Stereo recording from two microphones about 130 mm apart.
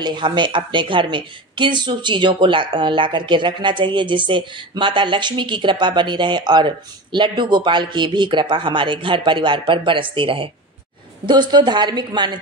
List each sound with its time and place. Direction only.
0.0 s a woman's voice: 35° right (ahead or behind)